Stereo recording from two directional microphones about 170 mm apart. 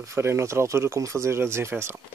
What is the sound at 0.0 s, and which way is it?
Speech, 15° right (ahead or behind).